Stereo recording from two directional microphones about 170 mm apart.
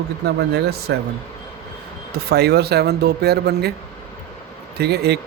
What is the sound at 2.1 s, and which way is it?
Speech, 70° right (ahead or behind).